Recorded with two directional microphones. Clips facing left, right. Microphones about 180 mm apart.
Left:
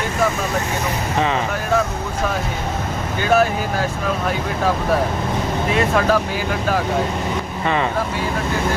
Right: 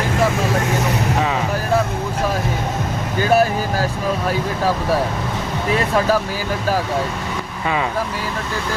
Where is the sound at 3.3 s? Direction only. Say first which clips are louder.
Even; 35° right (ahead or behind).